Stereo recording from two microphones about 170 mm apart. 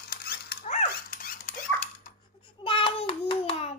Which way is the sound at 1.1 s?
55° left (ahead or behind).